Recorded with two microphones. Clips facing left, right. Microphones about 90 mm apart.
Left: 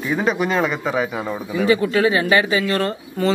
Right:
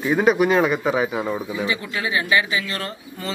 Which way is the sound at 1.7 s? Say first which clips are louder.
Left 9 dB; 40° left (ahead or behind).